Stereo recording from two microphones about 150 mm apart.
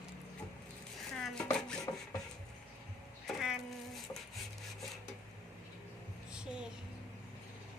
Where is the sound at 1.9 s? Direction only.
25° left (ahead or behind).